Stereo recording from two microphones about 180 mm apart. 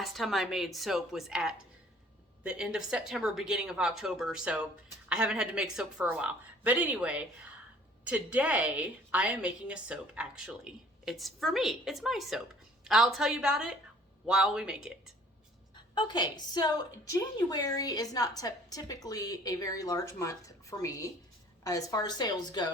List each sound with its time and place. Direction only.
0.0 s a woman's voice: centre (ahead or behind)
16.0 s a woman's voice: 25° left (ahead or behind)